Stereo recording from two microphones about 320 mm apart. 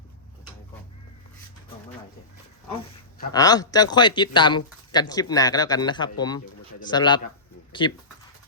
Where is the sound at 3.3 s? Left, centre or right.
Centre.